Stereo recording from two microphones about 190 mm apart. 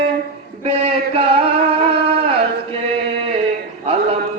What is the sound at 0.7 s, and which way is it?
Male singing, 30° right (ahead or behind).